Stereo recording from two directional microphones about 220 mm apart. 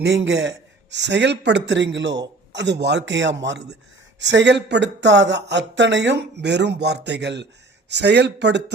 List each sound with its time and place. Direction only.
0.0 s speech: 55° right (ahead or behind)